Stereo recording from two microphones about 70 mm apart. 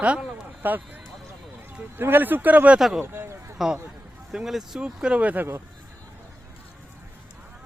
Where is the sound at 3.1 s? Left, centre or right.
Right.